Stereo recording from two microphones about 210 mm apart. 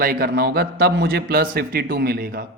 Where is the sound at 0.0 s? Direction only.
45° right (ahead or behind).